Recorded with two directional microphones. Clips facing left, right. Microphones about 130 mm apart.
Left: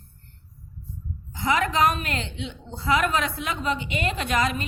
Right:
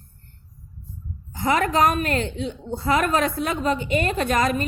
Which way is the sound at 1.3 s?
45° right (ahead or behind).